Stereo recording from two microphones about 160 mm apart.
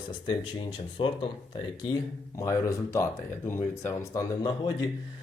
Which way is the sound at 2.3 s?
20° left (ahead or behind).